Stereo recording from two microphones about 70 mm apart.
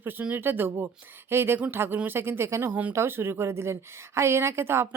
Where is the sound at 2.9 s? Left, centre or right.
Right.